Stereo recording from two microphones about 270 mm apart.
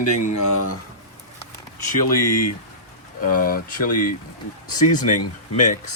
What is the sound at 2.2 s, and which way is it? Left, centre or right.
Speech, left.